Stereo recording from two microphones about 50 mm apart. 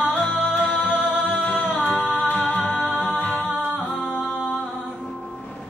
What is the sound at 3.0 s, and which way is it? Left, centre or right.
A capella, left.